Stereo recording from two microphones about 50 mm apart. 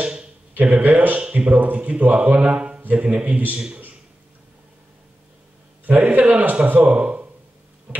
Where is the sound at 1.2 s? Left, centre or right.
Right.